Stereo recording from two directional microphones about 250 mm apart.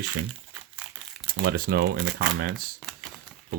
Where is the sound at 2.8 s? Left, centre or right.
Centre.